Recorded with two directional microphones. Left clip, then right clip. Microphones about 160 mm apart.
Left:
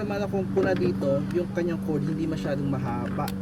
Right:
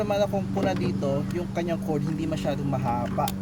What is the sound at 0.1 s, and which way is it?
Speech, 85° right.